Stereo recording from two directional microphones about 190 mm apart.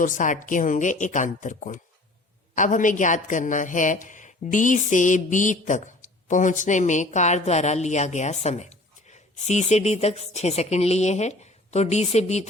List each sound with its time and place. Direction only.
0.0 s a woman's voice: 40° left (ahead or behind)